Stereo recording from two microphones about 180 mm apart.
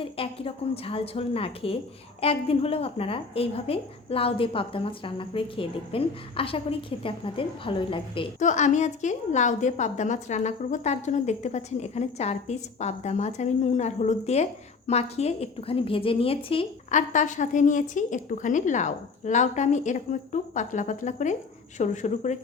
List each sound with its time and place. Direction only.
0.0 s a woman's voice: 30° left (ahead or behind)
8.4 s a woman's voice: 45° left (ahead or behind)
16.9 s a woman's voice: 45° left (ahead or behind)